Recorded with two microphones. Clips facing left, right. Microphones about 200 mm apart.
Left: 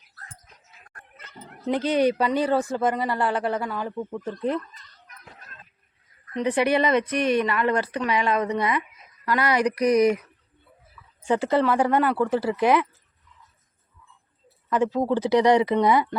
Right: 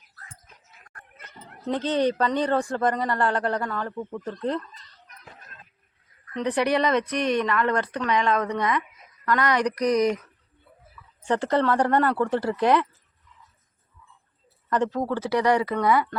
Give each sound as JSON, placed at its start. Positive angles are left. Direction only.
{"t": 1.6, "sound": "speech", "side_deg": 10}
{"t": 6.3, "sound": "speech", "side_deg": 5}
{"t": 11.3, "sound": "speech", "side_deg": 5}
{"t": 14.7, "sound": "speech", "side_deg": 10}